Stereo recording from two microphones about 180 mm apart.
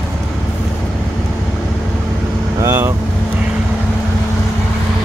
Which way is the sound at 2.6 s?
15° right (ahead or behind).